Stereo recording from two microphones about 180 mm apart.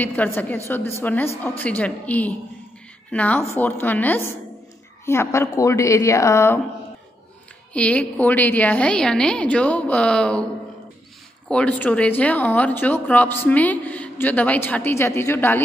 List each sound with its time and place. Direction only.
0.0 s speech: 10° left (ahead or behind)
7.7 s speech: 5° left (ahead or behind)
11.4 s speech: 5° left (ahead or behind)